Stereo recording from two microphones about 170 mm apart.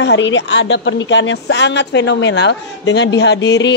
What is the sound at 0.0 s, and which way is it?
Speech, 90° left.